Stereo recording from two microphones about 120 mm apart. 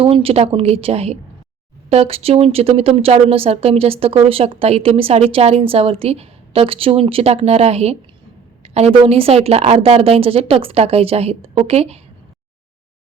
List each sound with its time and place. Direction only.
0.0 s a woman's voice: 50° right (ahead or behind)
8.6 s a sound: 60° right (ahead or behind)
9.0 s a woman's voice: 55° right (ahead or behind)